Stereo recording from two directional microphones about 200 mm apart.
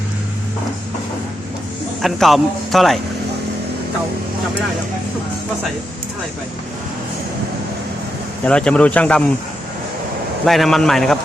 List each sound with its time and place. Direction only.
2.0 s a man's voice: centre (ahead or behind)
8.4 s a man's voice: 5° left (ahead or behind)
10.4 s a man's voice: centre (ahead or behind)